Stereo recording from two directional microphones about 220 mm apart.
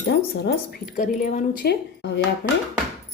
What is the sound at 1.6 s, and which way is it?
Speech, 50° left (ahead or behind).